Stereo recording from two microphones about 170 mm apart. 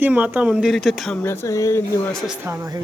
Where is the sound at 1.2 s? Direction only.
15° left (ahead or behind).